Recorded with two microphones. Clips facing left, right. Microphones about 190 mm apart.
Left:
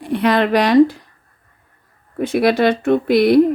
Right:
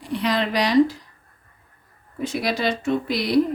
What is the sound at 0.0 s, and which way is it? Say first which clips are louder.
A woman's voice: left 7 dB; 55° left (ahead or behind).